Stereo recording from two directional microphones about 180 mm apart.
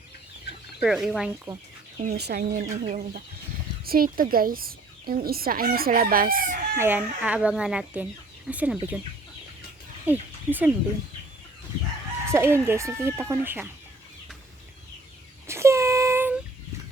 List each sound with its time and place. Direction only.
0.8 s speech: centre (ahead or behind)
2.0 s speech: 60° right (ahead or behind)
2.6 s speech: 45° right (ahead or behind)
6.7 s speech: 10° right (ahead or behind)
10.1 s speech: 10° right (ahead or behind)
12.2 s speech: 15° right (ahead or behind)
15.4 s a sound: 15° right (ahead or behind)